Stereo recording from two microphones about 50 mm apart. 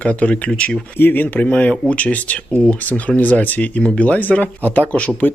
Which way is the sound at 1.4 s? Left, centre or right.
Left.